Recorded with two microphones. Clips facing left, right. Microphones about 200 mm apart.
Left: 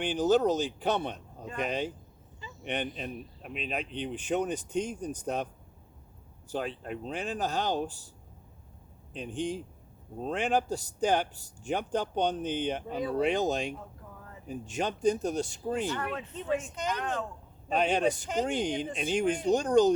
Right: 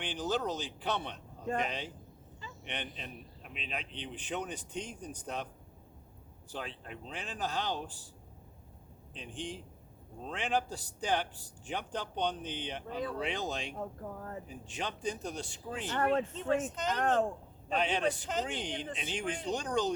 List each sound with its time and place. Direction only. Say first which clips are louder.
0.0 s speech: left 9 dB; 45° left (ahead or behind)
6.5 s speech: left 8 dB; 45° left (ahead or behind)
9.1 s speech: left 9 dB; 45° left (ahead or behind)
13.7 s speech: right 6 dB; 50° right (ahead or behind)
14.4 s speech: left 7 dB; 45° left (ahead or behind)
16.0 s speech: right 6 dB; 45° right (ahead or behind)
16.3 s speech: even; 10° left (ahead or behind)
17.0 s speech: right 5 dB; 50° right (ahead or behind)
17.7 s speech: left 5 dB; 45° left (ahead or behind)